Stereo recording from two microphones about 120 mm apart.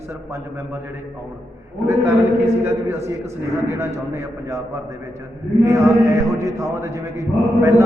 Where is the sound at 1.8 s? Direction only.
25° right (ahead or behind).